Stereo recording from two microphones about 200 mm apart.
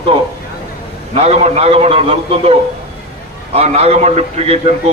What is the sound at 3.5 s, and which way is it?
A man's voice, 35° right (ahead or behind).